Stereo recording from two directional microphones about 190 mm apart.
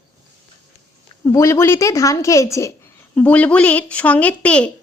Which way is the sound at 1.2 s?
15° left (ahead or behind).